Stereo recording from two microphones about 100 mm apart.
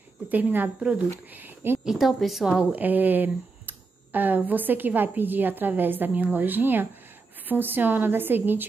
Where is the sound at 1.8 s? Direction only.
Centre (ahead or behind).